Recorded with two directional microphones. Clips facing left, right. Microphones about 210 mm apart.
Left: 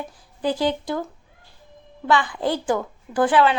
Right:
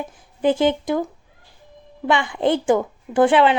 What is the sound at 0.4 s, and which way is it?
Speech, 20° right (ahead or behind).